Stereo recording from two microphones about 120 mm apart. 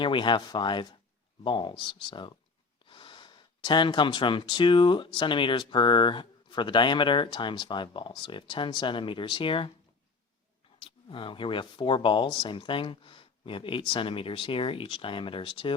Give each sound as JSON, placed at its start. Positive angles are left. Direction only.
{"t": 0.0, "sound": "speech", "side_deg": 40}
{"t": 10.8, "sound": "speech", "side_deg": 45}